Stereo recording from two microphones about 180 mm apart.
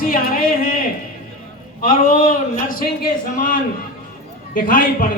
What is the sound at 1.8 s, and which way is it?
A man's voice, 50° left (ahead or behind).